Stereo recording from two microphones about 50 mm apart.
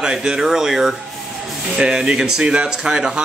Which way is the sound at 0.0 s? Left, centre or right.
Centre.